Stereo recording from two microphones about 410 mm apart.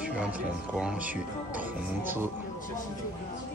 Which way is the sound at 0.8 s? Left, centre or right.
Centre.